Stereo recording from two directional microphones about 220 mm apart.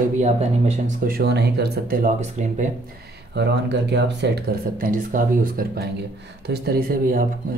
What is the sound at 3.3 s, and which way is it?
Speech, 50° right (ahead or behind).